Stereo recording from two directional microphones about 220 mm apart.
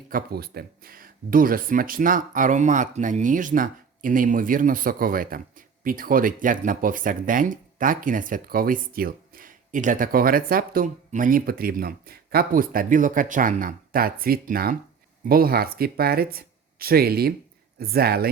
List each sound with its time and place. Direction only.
0.1 s speech: 45° right (ahead or behind)